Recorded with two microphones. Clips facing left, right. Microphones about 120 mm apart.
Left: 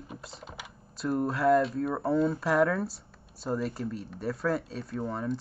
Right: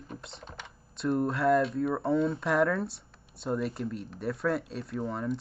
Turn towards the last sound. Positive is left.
turn(degrees=0)  # may be behind; listen again after turning